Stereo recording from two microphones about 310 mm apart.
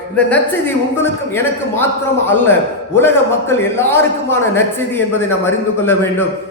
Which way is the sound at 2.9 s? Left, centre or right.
Centre.